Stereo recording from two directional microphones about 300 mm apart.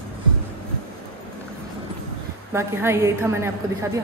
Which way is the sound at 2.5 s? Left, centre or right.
Centre.